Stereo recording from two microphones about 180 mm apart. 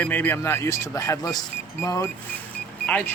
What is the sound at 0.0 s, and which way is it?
Speech, 10° left (ahead or behind).